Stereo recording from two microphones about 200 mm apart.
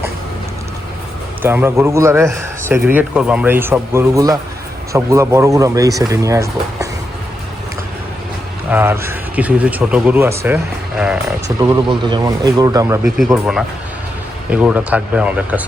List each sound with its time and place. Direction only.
1.4 s a man's voice: 10° right (ahead or behind)
8.7 s a man's voice: 10° right (ahead or behind)
11.4 s a man's voice: 15° right (ahead or behind)
13.1 s speech: centre (ahead or behind)
14.5 s a man's voice: 5° right (ahead or behind)